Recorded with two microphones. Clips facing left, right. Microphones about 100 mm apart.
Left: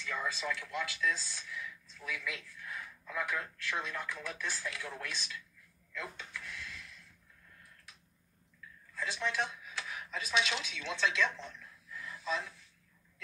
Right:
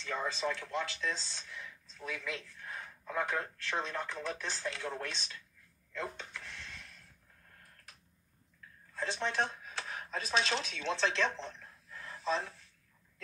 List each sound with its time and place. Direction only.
0.0 s speech: 35° right (ahead or behind)
5.9 s a sound: 35° right (ahead or behind)
7.6 s tick-tock: 45° right (ahead or behind)
8.9 s speech: 35° right (ahead or behind)